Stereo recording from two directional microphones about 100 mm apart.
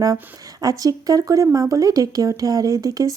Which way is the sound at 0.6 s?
35° right (ahead or behind).